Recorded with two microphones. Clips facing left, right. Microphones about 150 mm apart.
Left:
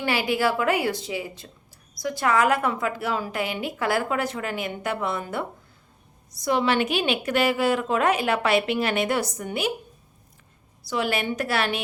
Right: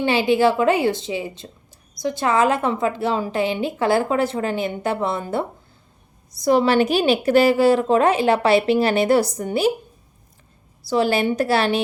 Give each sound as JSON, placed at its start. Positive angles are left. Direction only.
{"t": 0.0, "sound": "a woman's voice", "side_deg": -25}
{"t": 10.8, "sound": "a woman's voice", "side_deg": -35}